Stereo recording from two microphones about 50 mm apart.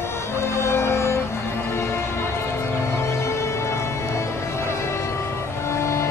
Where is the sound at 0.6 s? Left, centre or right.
Left.